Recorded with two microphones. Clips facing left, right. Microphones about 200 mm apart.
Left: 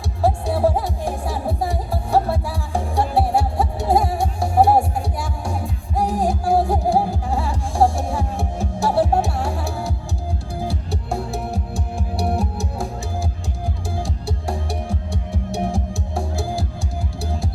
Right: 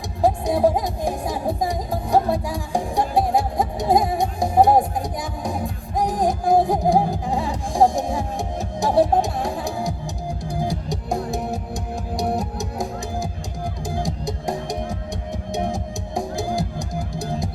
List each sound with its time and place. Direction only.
0.2 s music: 15° right (ahead or behind)
13.9 s music: 15° right (ahead or behind)